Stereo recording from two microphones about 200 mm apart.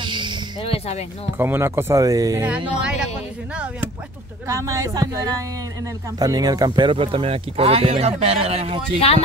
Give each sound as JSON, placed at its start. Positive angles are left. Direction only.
{"t": 0.0, "sound": "a sound", "side_deg": -25}
{"t": 0.6, "sound": "speech", "side_deg": 30}
{"t": 1.4, "sound": "speech", "side_deg": -10}